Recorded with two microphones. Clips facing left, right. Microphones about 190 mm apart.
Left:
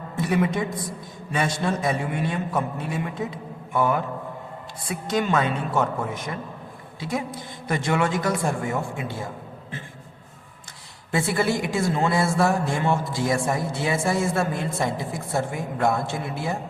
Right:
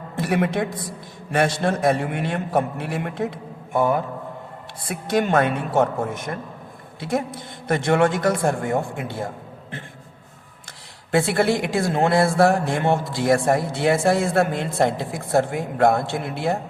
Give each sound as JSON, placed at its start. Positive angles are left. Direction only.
{"t": 0.2, "sound": "a man's voice", "side_deg": -65}
{"t": 4.9, "sound": "speech", "side_deg": -60}
{"t": 11.1, "sound": "speech", "side_deg": -70}